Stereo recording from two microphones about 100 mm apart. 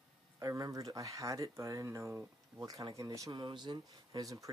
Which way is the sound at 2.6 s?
35° right (ahead or behind).